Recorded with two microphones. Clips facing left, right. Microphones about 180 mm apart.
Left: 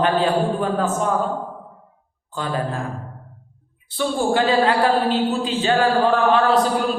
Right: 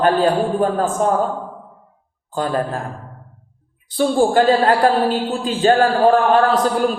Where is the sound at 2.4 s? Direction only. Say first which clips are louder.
Right 5 dB; 45° right (ahead or behind).